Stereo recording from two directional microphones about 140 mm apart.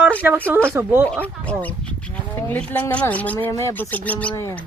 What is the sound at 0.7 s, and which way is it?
Speech, 15° right (ahead or behind).